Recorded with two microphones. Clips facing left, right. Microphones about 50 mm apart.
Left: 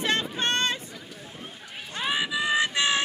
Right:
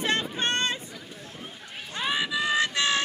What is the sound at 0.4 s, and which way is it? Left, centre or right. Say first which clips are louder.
Boat: left 1 dB; centre.